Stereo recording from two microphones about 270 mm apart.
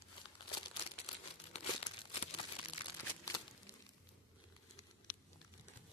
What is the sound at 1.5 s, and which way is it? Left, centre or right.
Crumpling, left.